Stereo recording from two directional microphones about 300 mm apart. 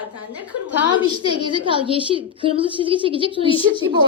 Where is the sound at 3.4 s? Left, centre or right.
Centre.